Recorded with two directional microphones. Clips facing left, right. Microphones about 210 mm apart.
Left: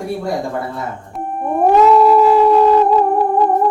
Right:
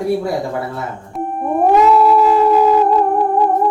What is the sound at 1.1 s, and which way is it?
Howl, centre (ahead or behind).